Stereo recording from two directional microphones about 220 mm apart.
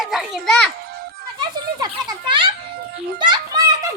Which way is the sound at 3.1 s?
20° right (ahead or behind).